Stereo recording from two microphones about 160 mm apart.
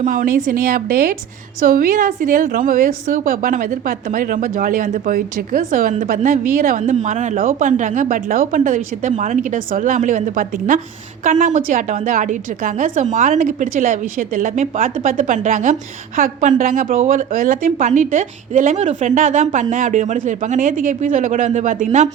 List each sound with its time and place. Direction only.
0.0 s a woman's voice: 55° right (ahead or behind)